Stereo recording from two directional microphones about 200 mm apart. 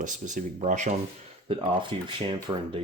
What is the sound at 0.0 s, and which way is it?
Speech, 40° right (ahead or behind).